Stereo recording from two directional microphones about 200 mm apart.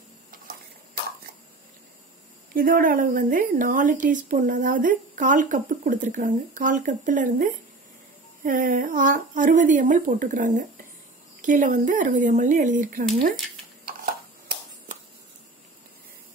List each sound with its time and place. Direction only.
2.5 s a woman's voice: 45° right (ahead or behind)